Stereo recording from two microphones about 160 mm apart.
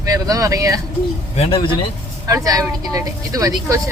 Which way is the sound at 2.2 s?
20° right (ahead or behind).